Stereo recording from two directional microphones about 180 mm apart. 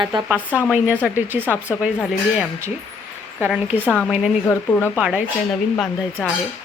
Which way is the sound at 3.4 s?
10° right (ahead or behind).